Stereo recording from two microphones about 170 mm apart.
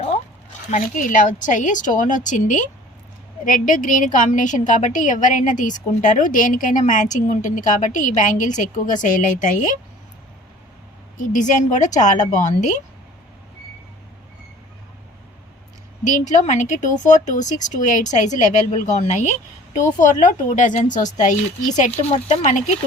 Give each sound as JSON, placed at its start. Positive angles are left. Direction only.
{"t": 0.7, "sound": "a woman's voice", "side_deg": 50}
{"t": 11.2, "sound": "a woman's voice", "side_deg": 50}
{"t": 16.0, "sound": "a woman's voice", "side_deg": 45}